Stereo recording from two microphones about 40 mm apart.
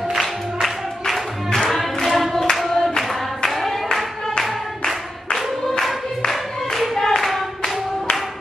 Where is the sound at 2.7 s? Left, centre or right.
Centre.